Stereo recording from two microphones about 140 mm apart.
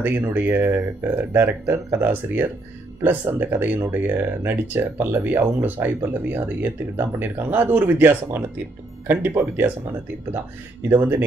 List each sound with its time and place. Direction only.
0.0 s speech: 15° right (ahead or behind)
10.9 s speech: 15° right (ahead or behind)